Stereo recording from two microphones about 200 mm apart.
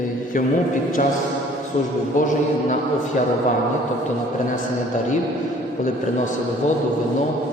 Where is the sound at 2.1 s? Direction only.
40° left (ahead or behind).